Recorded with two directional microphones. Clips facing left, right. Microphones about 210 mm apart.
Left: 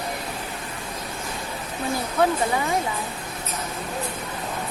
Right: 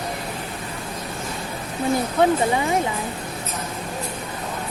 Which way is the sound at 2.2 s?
25° right (ahead or behind).